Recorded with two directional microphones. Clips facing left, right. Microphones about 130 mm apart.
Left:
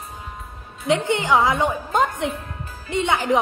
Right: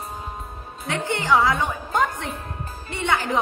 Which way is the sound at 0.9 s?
20° left (ahead or behind).